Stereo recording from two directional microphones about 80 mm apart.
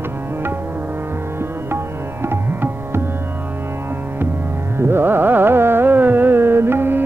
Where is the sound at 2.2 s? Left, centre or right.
Right.